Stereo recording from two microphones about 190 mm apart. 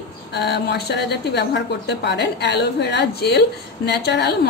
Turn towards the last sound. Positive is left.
turn(degrees=60)  # may be behind; listen again after turning